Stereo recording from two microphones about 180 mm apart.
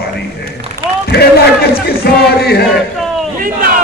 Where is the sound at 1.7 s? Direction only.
60° left (ahead or behind).